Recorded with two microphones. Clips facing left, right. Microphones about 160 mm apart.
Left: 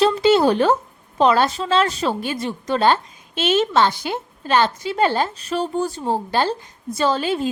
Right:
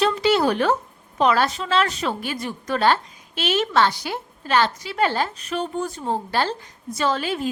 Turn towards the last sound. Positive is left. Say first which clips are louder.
# left 3 dB
turn(degrees=30)  # may be behind; listen again after turning